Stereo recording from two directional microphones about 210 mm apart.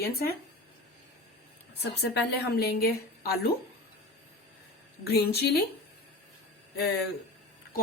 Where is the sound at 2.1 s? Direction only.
50° left (ahead or behind).